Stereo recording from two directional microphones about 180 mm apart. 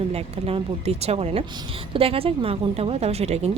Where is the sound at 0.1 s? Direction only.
35° right (ahead or behind).